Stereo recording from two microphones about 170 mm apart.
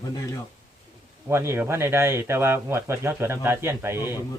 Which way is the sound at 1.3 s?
15° right (ahead or behind).